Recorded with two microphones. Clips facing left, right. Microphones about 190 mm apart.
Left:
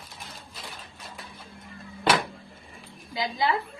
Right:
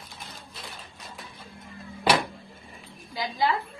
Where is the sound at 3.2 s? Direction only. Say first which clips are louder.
Even; 20° left (ahead or behind).